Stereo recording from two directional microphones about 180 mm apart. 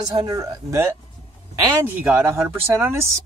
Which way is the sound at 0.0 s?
25° right (ahead or behind).